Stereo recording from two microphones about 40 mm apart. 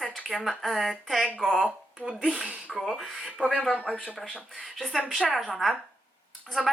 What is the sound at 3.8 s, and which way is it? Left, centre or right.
Speech, centre.